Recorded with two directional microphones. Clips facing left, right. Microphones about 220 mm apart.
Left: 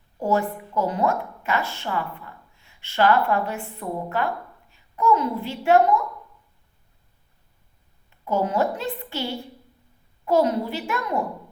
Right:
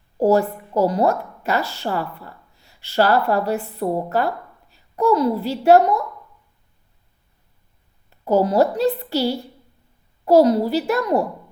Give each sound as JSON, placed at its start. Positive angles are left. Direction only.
{"t": 0.2, "sound": "a woman's voice", "side_deg": -40}
{"t": 8.2, "sound": "a woman's voice", "side_deg": -40}